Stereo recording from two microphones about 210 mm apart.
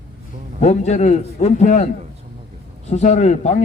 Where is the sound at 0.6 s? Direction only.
35° left (ahead or behind).